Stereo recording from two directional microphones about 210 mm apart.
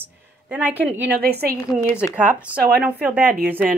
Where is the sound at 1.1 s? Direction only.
50° right (ahead or behind).